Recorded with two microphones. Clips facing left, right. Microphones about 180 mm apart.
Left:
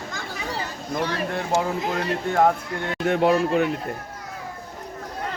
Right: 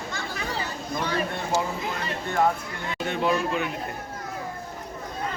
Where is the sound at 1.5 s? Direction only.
20° left (ahead or behind).